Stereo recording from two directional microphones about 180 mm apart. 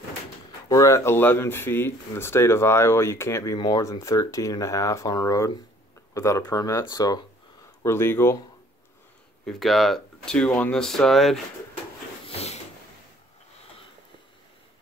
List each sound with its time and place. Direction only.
0.5 s speech: 20° left (ahead or behind)
9.5 s speech: centre (ahead or behind)
12.3 s a sound: 35° left (ahead or behind)